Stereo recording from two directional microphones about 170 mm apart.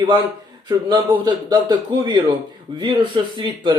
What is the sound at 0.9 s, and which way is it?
Speech, 25° right (ahead or behind).